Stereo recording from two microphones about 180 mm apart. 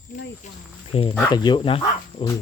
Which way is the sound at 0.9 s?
30° left (ahead or behind).